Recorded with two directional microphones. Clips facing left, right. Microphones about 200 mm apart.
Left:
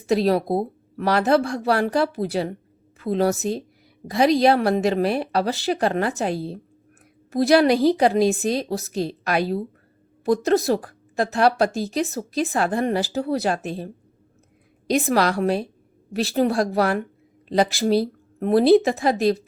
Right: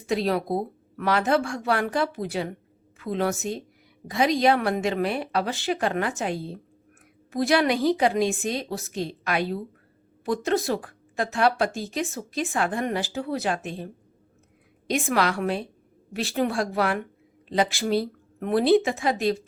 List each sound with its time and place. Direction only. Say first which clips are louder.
0.1 s speech: left 5 dB; 35° left (ahead or behind)